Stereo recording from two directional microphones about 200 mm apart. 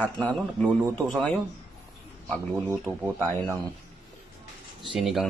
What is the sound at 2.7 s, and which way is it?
Speech, 10° right (ahead or behind).